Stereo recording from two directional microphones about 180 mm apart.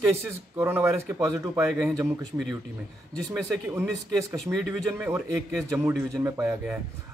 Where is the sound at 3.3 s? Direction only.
10° right (ahead or behind).